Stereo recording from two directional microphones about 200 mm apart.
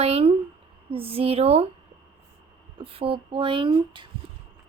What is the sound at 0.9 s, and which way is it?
Speech, 30° right (ahead or behind).